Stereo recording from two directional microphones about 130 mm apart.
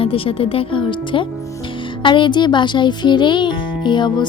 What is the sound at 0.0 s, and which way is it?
A child's voice, 45° left (ahead or behind).